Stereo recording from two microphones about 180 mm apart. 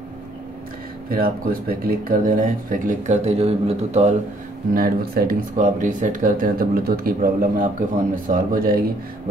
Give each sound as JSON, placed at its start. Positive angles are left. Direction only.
{"t": 1.1, "sound": "speech", "side_deg": -55}
{"t": 4.7, "sound": "speech", "side_deg": -55}